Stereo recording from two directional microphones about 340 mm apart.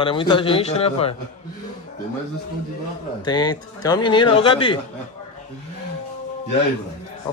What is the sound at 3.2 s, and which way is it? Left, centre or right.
Speech, centre.